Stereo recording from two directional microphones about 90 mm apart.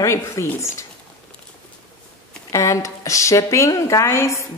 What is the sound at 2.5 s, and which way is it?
A woman's voice, 35° left (ahead or behind).